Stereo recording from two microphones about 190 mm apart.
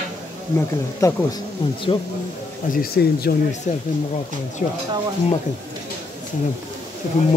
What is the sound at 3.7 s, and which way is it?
Speech, 40° left (ahead or behind).